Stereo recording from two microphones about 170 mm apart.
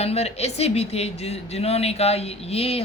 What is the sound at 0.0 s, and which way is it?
Speech, 40° left (ahead or behind).